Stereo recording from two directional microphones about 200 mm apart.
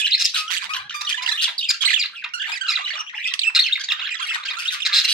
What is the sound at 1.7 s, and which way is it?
Bird, centre (ahead or behind).